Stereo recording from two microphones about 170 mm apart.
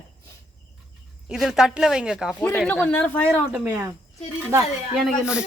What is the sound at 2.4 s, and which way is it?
Speech, 10° left (ahead or behind).